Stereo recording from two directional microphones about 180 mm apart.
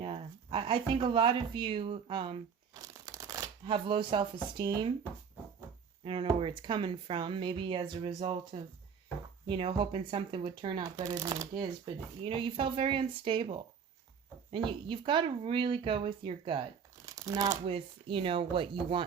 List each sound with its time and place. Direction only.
0.0 s speech: 30° right (ahead or behind)
6.1 s speech: 30° right (ahead or behind)
9.5 s speech: 30° right (ahead or behind)
10.9 s speech: 20° right (ahead or behind)
17.7 s speech: 30° right (ahead or behind)